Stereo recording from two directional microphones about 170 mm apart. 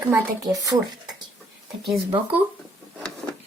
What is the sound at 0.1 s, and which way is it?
Speech, 20° right (ahead or behind).